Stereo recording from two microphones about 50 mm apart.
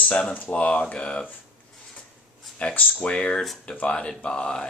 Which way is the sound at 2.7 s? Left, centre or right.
Left.